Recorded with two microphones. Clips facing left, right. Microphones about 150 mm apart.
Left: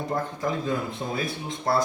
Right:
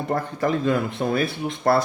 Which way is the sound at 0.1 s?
75° right (ahead or behind).